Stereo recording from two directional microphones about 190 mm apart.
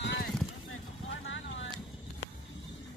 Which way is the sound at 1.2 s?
80° left.